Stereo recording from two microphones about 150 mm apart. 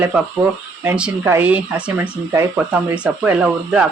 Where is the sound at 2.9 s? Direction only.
10° right (ahead or behind).